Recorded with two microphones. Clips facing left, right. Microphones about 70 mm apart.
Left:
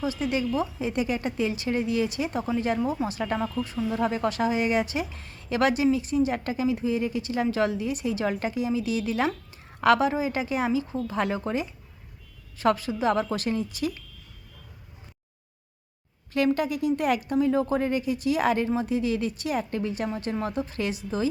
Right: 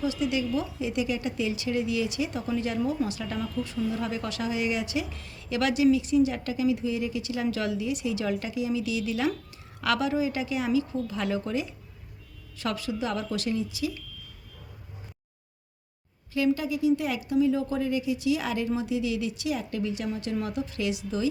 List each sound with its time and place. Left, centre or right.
0.0 s speech: left
16.3 s speech: left